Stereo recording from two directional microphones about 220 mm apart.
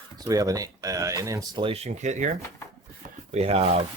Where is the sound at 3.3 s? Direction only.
30° right (ahead or behind).